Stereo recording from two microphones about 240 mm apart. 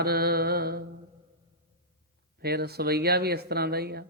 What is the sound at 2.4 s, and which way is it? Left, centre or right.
Speech, right.